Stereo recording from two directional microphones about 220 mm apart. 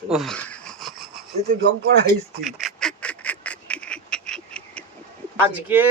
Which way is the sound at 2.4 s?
Centre (ahead or behind).